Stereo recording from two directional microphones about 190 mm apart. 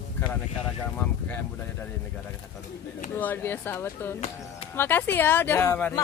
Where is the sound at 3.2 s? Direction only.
10° left (ahead or behind).